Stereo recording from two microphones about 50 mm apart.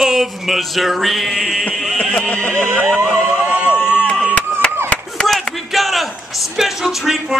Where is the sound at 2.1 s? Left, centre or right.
Left.